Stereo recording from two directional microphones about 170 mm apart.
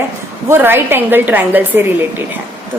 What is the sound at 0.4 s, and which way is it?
A woman's voice, 15° right (ahead or behind).